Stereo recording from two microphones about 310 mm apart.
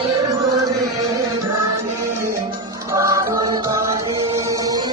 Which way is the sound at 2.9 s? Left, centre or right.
Centre.